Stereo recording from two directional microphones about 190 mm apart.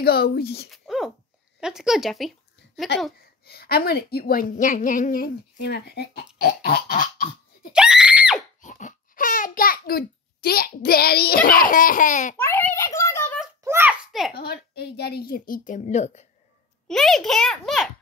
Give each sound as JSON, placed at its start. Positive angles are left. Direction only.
{"t": 0.0, "sound": "speech", "side_deg": 55}
{"t": 0.7, "sound": "a sound", "side_deg": 0}
{"t": 1.6, "sound": "a child's voice", "side_deg": -5}
{"t": 2.9, "sound": "a woman's voice", "side_deg": 60}
{"t": 7.7, "sound": "screaming", "side_deg": -5}
{"t": 8.6, "sound": "a child's voice", "side_deg": 40}
{"t": 12.4, "sound": "a sound", "side_deg": 10}
{"t": 13.7, "sound": "a sound", "side_deg": -10}
{"t": 14.3, "sound": "a woman's voice", "side_deg": 55}
{"t": 16.8, "sound": "a child's voice", "side_deg": 0}